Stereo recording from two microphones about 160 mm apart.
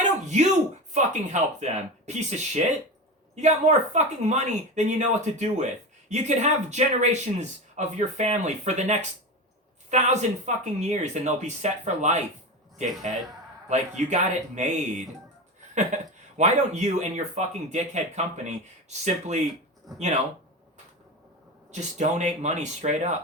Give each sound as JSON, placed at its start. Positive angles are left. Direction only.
{"t": 0.0, "sound": "a sound", "side_deg": -45}
{"t": 0.9, "sound": "a man's voice", "side_deg": -45}
{"t": 21.7, "sound": "a man's voice", "side_deg": -45}